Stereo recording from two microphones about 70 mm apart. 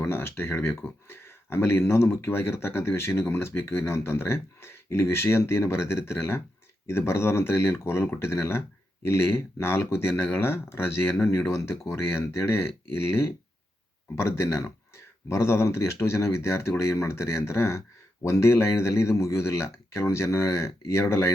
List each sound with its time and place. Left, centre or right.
0.0 s speech: left